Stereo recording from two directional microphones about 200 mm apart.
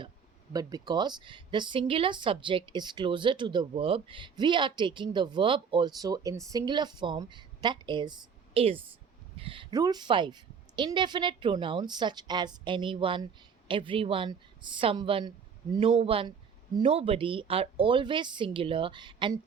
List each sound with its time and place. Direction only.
0.5 s speech: 20° right (ahead or behind)